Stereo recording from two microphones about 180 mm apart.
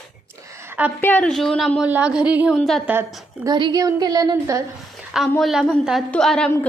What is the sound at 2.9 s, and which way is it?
A woman's voice, 15° right (ahead or behind).